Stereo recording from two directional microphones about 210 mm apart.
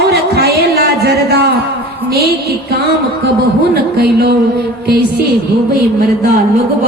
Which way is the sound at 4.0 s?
50° right (ahead or behind).